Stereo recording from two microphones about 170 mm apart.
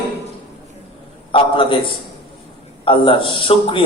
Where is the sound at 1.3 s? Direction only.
30° left (ahead or behind).